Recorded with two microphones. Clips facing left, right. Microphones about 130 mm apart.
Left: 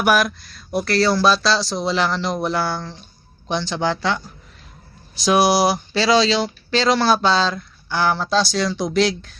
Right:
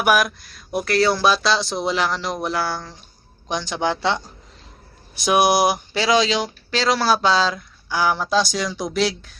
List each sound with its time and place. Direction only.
0.0 s speech: 10° right (ahead or behind)
5.2 s speech: 20° right (ahead or behind)